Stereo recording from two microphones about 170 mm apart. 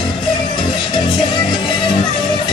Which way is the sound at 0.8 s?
30° left (ahead or behind).